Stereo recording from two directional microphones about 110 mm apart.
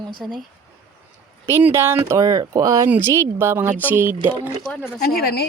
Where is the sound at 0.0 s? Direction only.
45° right (ahead or behind).